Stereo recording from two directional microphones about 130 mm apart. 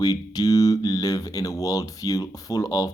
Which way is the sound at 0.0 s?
30° left (ahead or behind).